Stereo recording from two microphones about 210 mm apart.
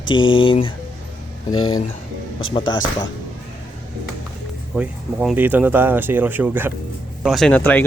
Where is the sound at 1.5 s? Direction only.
85° left.